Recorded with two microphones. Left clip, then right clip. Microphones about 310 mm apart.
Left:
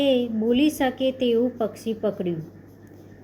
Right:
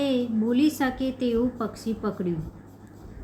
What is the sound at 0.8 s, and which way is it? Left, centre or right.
Speech, right.